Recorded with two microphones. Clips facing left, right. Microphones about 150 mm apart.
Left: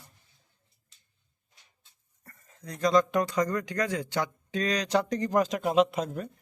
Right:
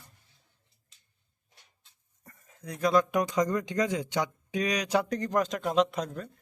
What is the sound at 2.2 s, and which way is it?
Speech, 10° right (ahead or behind).